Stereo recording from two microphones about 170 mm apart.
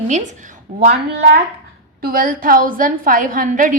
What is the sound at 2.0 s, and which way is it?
A woman's voice, 55° right (ahead or behind).